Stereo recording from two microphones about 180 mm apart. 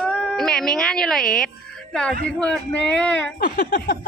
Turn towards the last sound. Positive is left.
turn(degrees=60)  # may be behind; listen again after turning